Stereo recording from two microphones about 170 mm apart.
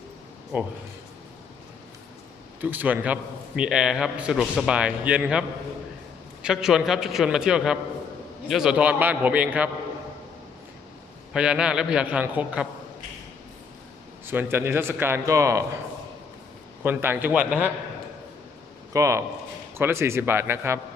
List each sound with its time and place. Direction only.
0.5 s a man's voice: 10° right (ahead or behind)
2.6 s a man's voice: 10° right (ahead or behind)
11.3 s a man's voice: 5° right (ahead or behind)
14.3 s a man's voice: 15° right (ahead or behind)
16.8 s a man's voice: 15° right (ahead or behind)
18.9 s a man's voice: 20° right (ahead or behind)